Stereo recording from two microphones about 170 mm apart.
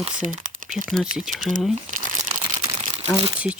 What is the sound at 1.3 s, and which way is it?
Speech, 50° right (ahead or behind).